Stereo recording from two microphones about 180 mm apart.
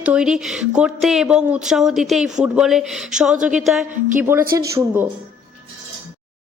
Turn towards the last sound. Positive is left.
turn(degrees=-15)  # may be behind; listen again after turning